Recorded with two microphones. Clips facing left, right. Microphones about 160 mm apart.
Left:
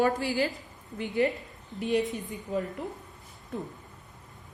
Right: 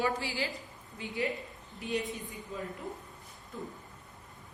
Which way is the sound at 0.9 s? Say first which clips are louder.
Left 8 dB; 60° left (ahead or behind).